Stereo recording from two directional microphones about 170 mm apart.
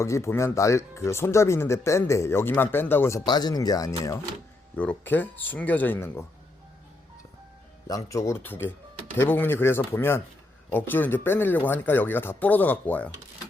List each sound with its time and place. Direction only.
0.0 s speech: 15° left (ahead or behind)
7.9 s speech: 20° left (ahead or behind)